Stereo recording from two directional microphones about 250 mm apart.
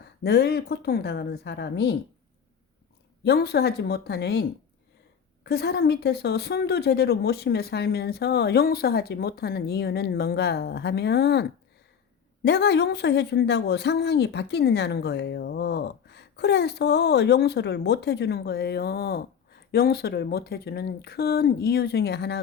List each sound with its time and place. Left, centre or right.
0.0 s speech: left
3.2 s speech: left